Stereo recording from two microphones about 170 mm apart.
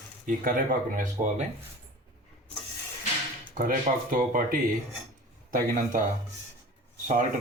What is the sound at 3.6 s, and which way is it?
Speech, 55° right (ahead or behind).